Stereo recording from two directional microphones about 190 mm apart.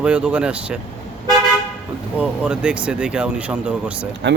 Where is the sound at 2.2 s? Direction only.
5° right (ahead or behind).